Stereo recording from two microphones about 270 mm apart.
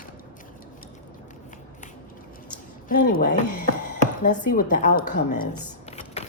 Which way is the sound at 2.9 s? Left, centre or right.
Left.